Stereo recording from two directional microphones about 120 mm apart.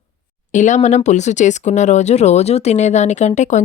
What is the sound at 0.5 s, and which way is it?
Speech, 90° left.